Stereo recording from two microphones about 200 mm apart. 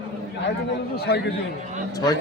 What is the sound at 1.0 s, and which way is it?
Speech, 55° left (ahead or behind).